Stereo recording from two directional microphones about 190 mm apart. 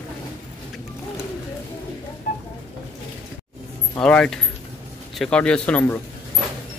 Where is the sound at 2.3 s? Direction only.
45° left (ahead or behind).